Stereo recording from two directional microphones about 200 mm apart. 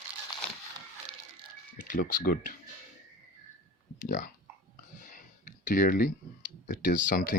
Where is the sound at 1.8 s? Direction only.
45° left (ahead or behind).